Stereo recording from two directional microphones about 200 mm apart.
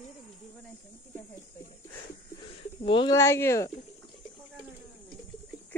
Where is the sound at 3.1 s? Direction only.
15° left (ahead or behind).